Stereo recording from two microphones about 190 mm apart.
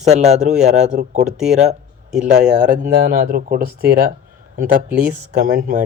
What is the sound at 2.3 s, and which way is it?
Speech, 45° right (ahead or behind).